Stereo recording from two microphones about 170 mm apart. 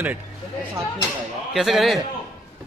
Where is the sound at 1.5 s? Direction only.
Centre (ahead or behind).